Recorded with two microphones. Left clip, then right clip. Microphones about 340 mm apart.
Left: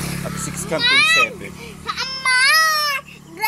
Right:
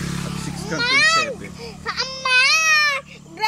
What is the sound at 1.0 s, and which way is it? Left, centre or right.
Music, centre.